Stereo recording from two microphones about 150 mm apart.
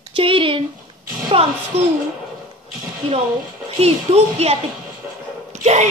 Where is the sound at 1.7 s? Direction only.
45° right (ahead or behind).